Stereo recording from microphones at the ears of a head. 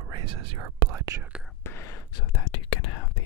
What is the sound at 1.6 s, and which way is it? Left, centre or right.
Whispering, left.